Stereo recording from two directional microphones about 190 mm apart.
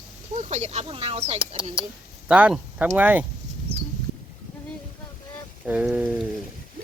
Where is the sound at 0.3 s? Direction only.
35° right (ahead or behind).